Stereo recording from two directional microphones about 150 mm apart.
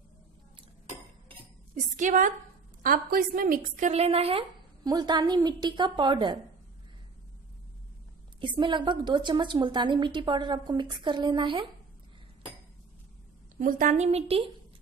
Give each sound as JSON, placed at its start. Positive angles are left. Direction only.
{"t": 2.0, "sound": "a woman's voice", "side_deg": -60}
{"t": 2.8, "sound": "a woman's voice", "side_deg": -75}
{"t": 4.8, "sound": "a woman's voice", "side_deg": -30}
{"t": 8.4, "sound": "a woman's voice", "side_deg": -30}
{"t": 13.6, "sound": "a woman's voice", "side_deg": -60}